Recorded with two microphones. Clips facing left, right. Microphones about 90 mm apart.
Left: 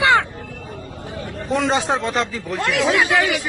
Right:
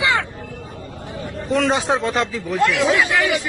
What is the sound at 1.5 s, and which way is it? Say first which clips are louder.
Speech: right 1 dB; centre (ahead or behind).